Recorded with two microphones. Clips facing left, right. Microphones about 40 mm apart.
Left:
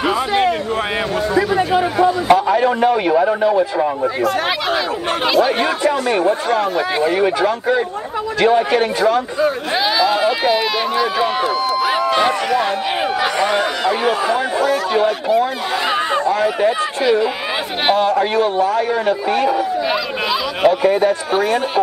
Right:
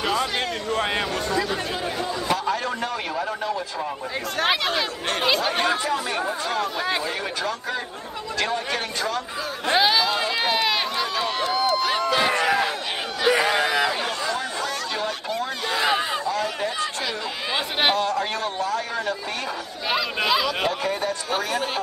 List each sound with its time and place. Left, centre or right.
0.0 s a man's voice: centre
1.8 s a man's voice: left
2.3 s a man's voice: left
4.2 s speech: centre
5.9 s a man's voice: left
9.7 s speech: centre
10.1 s run: centre
13.5 s a sound: centre
14.2 s chatter: left
17.9 s a man's voice: left
19.9 s speech: centre
20.6 s a man's voice: left